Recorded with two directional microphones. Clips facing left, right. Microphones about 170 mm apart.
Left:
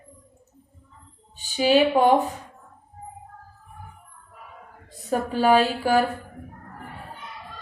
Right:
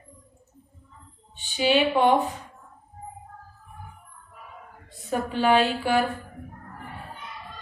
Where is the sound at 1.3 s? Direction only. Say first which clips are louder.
Left 3 dB; 40° left (ahead or behind).